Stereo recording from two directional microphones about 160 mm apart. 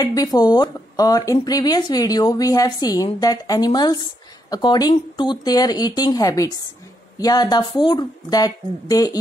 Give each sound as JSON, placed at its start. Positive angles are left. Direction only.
{"t": 0.0, "sound": "speech", "side_deg": 25}